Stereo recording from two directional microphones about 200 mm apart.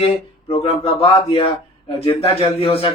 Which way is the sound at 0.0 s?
25° left (ahead or behind).